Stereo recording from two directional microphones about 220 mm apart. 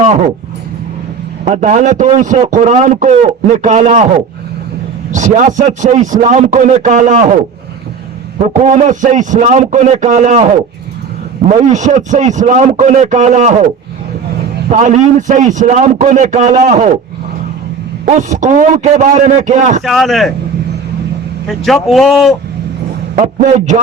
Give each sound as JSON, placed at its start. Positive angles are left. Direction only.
{"t": 0.0, "sound": "a sound", "side_deg": -30}
{"t": 1.5, "sound": "a man's voice", "side_deg": -35}
{"t": 5.1, "sound": "a man's voice", "side_deg": -35}
{"t": 8.4, "sound": "a man's voice", "side_deg": -30}
{"t": 11.6, "sound": "a man's voice", "side_deg": -35}
{"t": 14.7, "sound": "a man's voice", "side_deg": -35}
{"t": 18.0, "sound": "a man's voice", "side_deg": -35}
{"t": 19.8, "sound": "a man's voice", "side_deg": 0}
{"t": 21.4, "sound": "a man's voice", "side_deg": 0}
{"t": 23.1, "sound": "a man's voice", "side_deg": -35}